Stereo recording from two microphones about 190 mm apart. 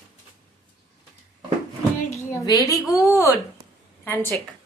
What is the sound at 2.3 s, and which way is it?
A woman's voice, 20° left (ahead or behind).